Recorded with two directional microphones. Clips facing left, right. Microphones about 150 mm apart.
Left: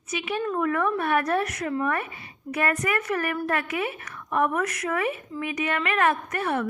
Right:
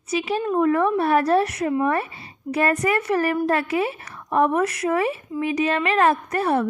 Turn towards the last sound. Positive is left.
turn(degrees=-35)  # may be behind; listen again after turning